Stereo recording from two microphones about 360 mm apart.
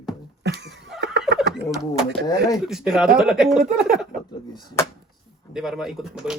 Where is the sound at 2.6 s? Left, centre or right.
Centre.